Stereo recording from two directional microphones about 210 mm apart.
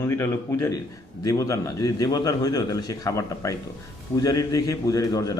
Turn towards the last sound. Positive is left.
turn(degrees=15)  # may be behind; listen again after turning